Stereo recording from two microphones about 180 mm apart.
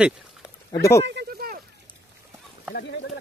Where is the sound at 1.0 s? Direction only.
70° right (ahead or behind).